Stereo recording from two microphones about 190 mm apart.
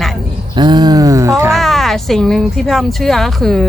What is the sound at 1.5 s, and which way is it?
Speech, centre (ahead or behind).